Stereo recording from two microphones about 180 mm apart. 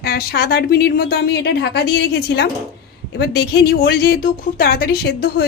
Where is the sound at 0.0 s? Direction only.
60° left (ahead or behind).